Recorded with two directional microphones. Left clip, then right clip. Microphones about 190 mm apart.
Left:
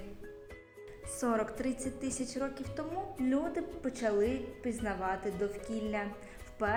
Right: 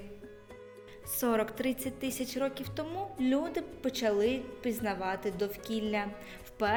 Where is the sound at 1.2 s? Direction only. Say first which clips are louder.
Right 3 dB; 75° right (ahead or behind).